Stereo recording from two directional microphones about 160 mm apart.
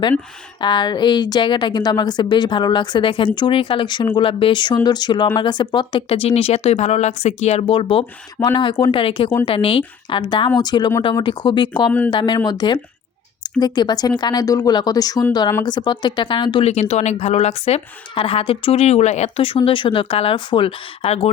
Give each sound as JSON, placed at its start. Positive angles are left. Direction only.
{"t": 0.6, "sound": "a woman's voice", "side_deg": 30}
{"t": 11.9, "sound": "speech", "side_deg": 10}
{"t": 12.1, "sound": "a woman's voice", "side_deg": 30}